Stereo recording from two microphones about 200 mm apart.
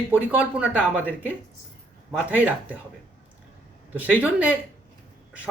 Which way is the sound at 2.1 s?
5° right (ahead or behind).